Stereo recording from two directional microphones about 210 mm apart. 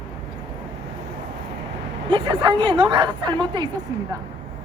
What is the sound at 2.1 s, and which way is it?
A woman's voice, 25° right (ahead or behind).